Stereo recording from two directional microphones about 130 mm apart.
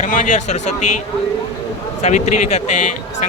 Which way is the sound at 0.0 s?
65° left (ahead or behind).